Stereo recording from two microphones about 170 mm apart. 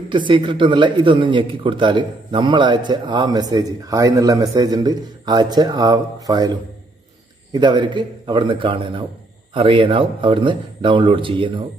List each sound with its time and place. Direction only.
0.1 s a man's voice: 30° right (ahead or behind)
7.5 s a man's voice: 25° right (ahead or behind)